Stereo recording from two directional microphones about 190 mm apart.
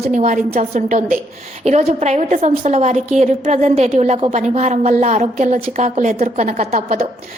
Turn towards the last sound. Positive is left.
turn(degrees=-35)  # may be behind; listen again after turning